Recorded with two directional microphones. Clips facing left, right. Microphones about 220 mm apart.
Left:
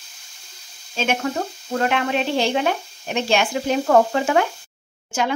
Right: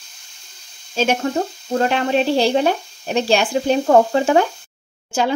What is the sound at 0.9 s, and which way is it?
Speech, 35° right (ahead or behind).